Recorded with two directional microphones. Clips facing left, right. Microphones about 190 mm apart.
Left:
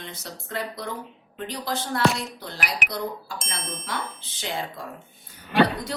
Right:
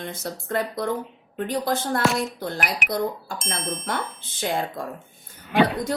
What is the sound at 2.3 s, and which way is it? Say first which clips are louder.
A woman's voice: right 4 dB; 50° right (ahead or behind).